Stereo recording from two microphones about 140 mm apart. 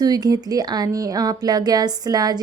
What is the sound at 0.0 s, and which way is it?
Speech, 30° right (ahead or behind).